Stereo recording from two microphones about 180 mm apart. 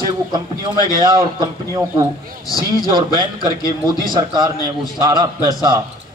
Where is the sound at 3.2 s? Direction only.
25° right (ahead or behind).